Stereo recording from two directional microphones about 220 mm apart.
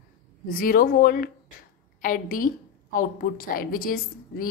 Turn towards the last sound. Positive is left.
turn(degrees=40)  # may be behind; listen again after turning